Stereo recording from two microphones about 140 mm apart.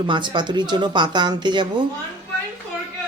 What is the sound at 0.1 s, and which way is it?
Speech, 35° right (ahead or behind).